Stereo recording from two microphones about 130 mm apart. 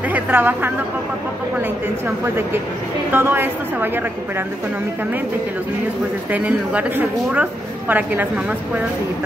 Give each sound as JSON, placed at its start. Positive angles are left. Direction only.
{"t": 0.1, "sound": "speech", "side_deg": -15}
{"t": 2.0, "sound": "speech", "side_deg": -20}
{"t": 6.3, "sound": "speech", "side_deg": -10}